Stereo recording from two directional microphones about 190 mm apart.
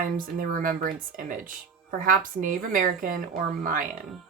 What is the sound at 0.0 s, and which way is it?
A woman's voice, 45° right (ahead or behind).